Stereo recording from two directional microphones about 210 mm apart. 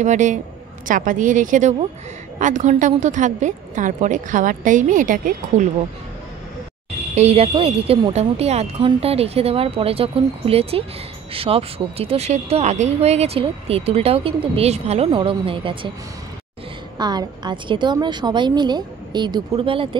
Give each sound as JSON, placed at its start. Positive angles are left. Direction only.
{"t": 0.0, "sound": "a woman's voice", "side_deg": -35}
{"t": 7.2, "sound": "speech", "side_deg": -30}
{"t": 17.0, "sound": "speech", "side_deg": -20}